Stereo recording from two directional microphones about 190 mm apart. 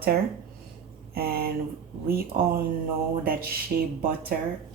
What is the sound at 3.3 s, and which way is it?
Speech, 50° right (ahead or behind).